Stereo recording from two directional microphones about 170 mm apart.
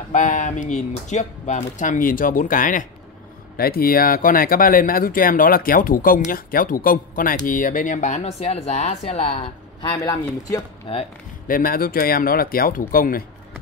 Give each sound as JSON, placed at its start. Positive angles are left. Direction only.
{"t": 0.1, "sound": "speech", "side_deg": 45}
{"t": 3.5, "sound": "speech", "side_deg": 60}
{"t": 9.9, "sound": "speech", "side_deg": 20}
{"t": 11.4, "sound": "speech", "side_deg": 55}